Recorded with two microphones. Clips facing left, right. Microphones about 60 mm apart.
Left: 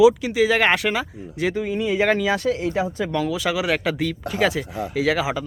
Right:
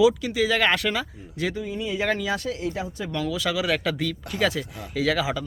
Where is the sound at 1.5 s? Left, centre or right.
Left.